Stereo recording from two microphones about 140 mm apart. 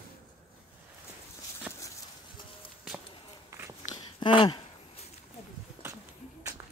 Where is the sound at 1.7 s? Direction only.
10° right (ahead or behind).